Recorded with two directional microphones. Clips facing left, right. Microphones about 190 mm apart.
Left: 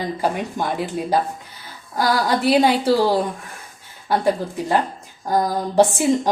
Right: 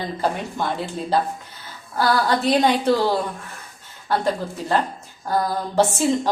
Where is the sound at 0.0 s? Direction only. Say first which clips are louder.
Left 2 dB; 10° left (ahead or behind).